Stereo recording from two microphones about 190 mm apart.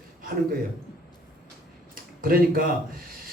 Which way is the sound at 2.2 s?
50° right (ahead or behind).